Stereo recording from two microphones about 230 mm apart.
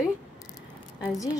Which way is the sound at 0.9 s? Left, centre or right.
Centre.